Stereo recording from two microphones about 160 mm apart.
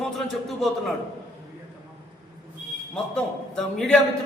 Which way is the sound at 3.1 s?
5° left (ahead or behind).